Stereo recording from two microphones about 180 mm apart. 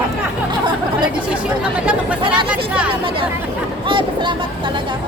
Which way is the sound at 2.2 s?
25° right (ahead or behind).